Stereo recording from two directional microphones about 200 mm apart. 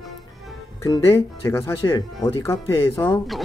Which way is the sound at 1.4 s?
15° left (ahead or behind).